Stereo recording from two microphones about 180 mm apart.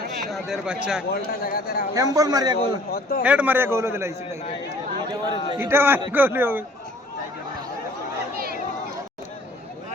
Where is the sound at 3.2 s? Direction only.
5° right (ahead or behind).